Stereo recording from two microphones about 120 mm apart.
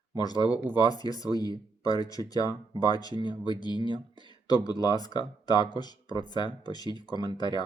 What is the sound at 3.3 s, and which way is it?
Speech, 45° right (ahead or behind).